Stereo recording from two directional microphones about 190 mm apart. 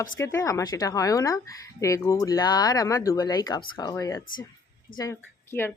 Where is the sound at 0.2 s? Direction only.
15° left (ahead or behind).